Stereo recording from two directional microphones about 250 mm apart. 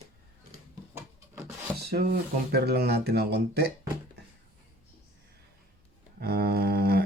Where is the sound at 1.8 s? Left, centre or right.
Right.